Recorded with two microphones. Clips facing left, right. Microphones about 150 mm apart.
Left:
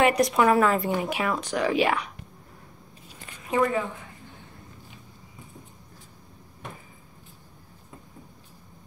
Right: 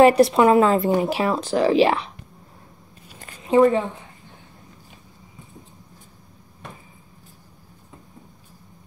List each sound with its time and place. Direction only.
0.0 s speech: 30° right (ahead or behind)
3.4 s speech: 30° right (ahead or behind)